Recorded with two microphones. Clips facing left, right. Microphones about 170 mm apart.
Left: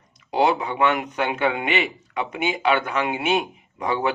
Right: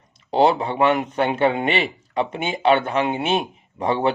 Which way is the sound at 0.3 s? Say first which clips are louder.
Right 3 dB; 30° right (ahead or behind).